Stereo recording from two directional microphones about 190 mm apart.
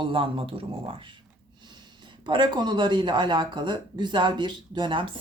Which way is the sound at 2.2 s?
25° right (ahead or behind).